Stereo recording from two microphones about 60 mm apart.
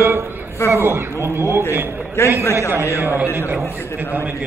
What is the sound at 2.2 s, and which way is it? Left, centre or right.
Speech, left.